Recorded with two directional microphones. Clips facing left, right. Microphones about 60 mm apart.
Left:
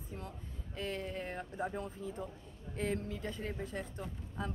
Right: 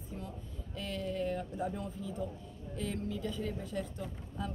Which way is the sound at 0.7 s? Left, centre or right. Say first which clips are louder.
Right 3 dB; left.